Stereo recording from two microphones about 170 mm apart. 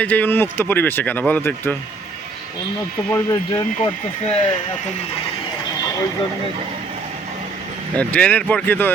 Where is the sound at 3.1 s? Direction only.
15° left (ahead or behind).